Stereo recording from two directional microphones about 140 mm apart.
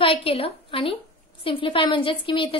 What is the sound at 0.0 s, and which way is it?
A woman's voice, 40° left (ahead or behind).